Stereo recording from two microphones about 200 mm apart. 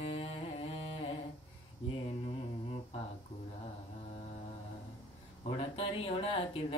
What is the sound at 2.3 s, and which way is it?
Humming, 30° left (ahead or behind).